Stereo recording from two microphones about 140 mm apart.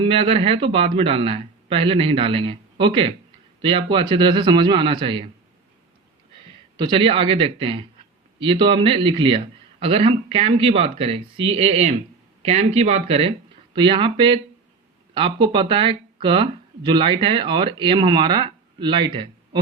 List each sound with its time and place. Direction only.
0.0 s speech: 40° right (ahead or behind)
6.7 s speech: 35° right (ahead or behind)